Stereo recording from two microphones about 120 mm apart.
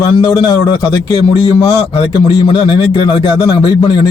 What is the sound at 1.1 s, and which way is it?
A man's voice, 50° left (ahead or behind).